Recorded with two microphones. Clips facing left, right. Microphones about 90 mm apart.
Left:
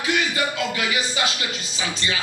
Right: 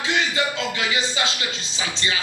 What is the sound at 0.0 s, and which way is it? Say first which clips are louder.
Speech: even; 25° right (ahead or behind).